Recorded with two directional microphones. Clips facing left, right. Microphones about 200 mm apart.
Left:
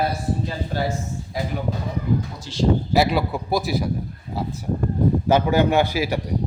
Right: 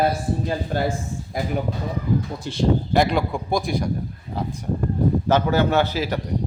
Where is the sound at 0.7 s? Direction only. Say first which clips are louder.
Right 1 dB; 50° right (ahead or behind).